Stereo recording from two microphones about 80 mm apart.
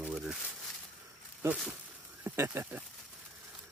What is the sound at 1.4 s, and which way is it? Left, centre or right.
Speech, right.